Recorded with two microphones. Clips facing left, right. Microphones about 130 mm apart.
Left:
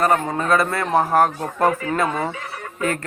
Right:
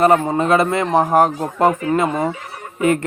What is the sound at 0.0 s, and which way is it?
Speech, 25° right (ahead or behind).